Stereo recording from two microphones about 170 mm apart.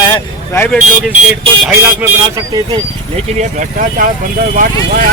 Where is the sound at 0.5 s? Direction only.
15° left (ahead or behind).